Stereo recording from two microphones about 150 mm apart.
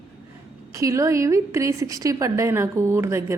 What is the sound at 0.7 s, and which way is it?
A woman's voice, 20° right (ahead or behind).